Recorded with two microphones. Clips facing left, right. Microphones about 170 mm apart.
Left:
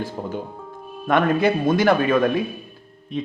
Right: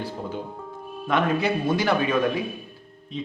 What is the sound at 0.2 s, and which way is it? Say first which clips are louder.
A man's voice: left 3 dB; 50° left (ahead or behind).